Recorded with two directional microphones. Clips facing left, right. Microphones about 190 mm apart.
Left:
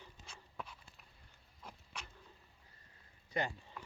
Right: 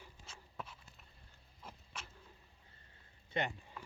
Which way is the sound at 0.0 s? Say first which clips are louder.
Even; centre (ahead or behind).